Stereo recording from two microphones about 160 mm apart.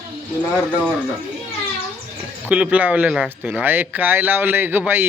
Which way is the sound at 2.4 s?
10° right (ahead or behind).